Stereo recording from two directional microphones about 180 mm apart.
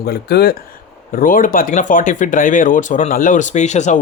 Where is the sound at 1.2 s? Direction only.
50° left (ahead or behind).